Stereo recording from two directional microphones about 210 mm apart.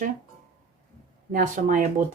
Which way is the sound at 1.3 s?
40° right (ahead or behind).